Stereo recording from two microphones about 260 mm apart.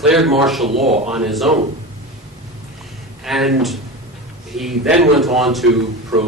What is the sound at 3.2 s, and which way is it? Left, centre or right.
A man's voice, centre.